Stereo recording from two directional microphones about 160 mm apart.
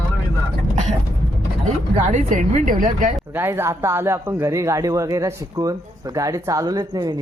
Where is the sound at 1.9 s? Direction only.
50° right (ahead or behind).